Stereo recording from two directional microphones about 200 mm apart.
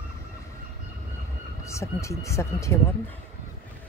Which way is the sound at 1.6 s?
15° left (ahead or behind).